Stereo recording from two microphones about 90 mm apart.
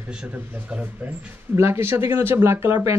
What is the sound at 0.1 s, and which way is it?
Speech, 10° right (ahead or behind).